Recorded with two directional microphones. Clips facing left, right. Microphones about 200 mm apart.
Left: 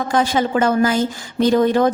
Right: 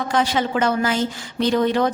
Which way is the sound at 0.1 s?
40° left (ahead or behind).